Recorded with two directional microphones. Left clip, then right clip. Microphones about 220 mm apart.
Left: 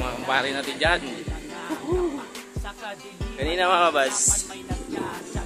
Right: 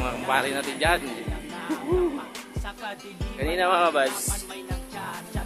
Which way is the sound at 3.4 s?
10° left (ahead or behind).